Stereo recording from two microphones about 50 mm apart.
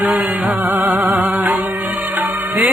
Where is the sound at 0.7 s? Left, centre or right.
Right.